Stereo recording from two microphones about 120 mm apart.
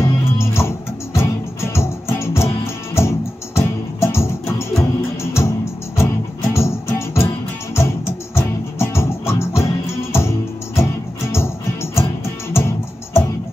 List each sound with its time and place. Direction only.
0.0 s music: 20° left (ahead or behind)
11.3 s music: 20° left (ahead or behind)